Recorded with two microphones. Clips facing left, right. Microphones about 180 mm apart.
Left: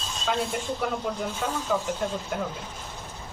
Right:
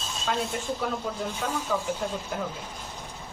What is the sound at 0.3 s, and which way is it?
Speech, centre (ahead or behind).